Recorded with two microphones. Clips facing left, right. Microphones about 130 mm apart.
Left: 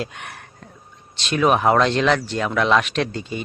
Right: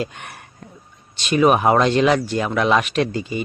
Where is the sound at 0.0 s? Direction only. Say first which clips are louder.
Right 2 dB; centre (ahead or behind).